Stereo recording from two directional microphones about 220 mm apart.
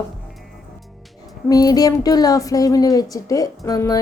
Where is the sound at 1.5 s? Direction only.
15° left (ahead or behind).